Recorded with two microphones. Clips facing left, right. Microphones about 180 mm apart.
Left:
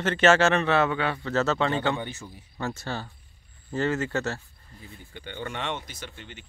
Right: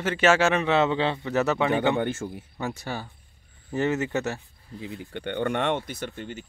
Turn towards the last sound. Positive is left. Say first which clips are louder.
# right 8 dB
turn(degrees=-45)  # may be behind; listen again after turning